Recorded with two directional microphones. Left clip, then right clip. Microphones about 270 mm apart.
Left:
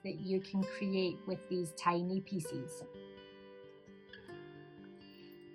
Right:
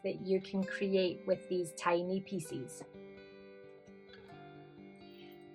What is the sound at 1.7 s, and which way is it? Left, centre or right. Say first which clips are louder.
Speech: right 1 dB; centre.